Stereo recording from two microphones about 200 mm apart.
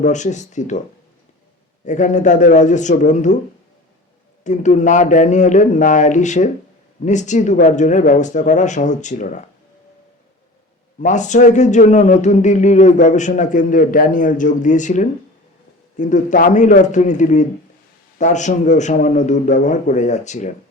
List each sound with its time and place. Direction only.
0.0 s speech: 35° left (ahead or behind)
1.8 s speech: 35° left (ahead or behind)
4.4 s speech: 35° left (ahead or behind)
11.0 s speech: 35° left (ahead or behind)